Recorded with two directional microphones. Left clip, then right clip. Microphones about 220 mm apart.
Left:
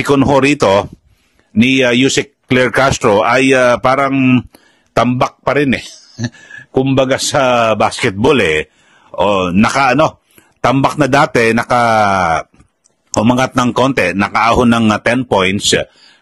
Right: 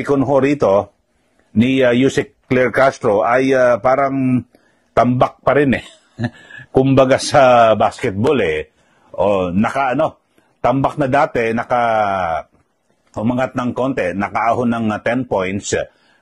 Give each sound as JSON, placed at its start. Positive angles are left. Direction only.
{"t": 0.0, "sound": "speech", "side_deg": 30}
{"t": 5.5, "sound": "speech", "side_deg": 25}
{"t": 9.6, "sound": "a man's voice", "side_deg": 40}